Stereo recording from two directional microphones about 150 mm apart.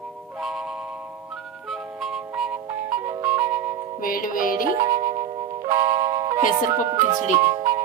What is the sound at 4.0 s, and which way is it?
Music, 70° left (ahead or behind).